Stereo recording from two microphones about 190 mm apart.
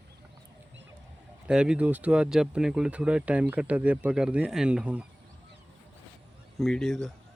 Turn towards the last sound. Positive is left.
turn(degrees=0)  # may be behind; listen again after turning